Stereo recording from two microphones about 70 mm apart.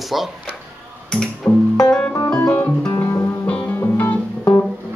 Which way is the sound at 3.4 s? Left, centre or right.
Left.